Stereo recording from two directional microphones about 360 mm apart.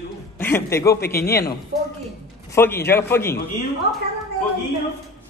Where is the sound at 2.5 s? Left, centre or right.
Centre.